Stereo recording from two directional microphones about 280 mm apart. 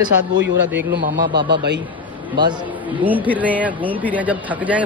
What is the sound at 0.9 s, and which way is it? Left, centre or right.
Speech, right.